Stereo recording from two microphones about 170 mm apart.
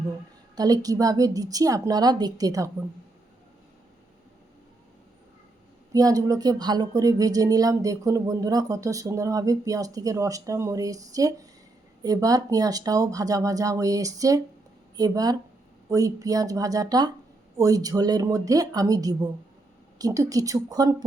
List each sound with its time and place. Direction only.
0.5 s speech: 20° right (ahead or behind)
5.9 s speech: 20° right (ahead or behind)